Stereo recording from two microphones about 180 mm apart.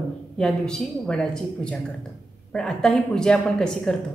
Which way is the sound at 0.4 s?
5° left (ahead or behind).